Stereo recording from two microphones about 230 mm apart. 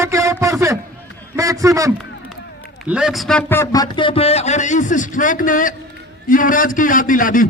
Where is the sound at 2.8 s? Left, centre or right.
Centre.